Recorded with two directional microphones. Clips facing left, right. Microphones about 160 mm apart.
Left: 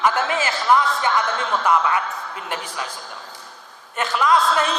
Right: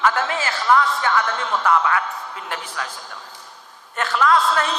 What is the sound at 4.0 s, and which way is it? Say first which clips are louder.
Speech: even; 15° left (ahead or behind).